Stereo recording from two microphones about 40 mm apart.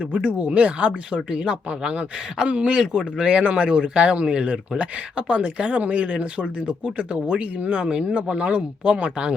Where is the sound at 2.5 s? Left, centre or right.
Right.